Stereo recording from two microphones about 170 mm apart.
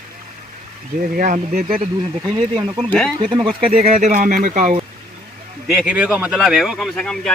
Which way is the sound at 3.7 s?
40° right (ahead or behind).